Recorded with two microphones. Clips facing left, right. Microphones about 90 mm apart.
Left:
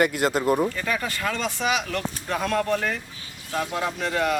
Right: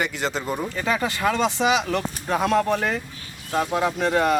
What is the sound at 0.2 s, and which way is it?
Speech, 5° left (ahead or behind).